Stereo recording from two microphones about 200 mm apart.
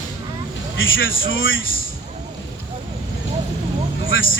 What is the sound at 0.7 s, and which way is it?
Speech, 75° left (ahead or behind).